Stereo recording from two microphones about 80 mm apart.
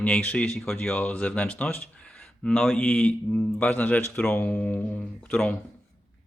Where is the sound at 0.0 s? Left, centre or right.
Centre.